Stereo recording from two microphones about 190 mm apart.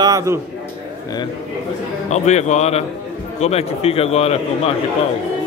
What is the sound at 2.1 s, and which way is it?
A man's voice, 35° left (ahead or behind).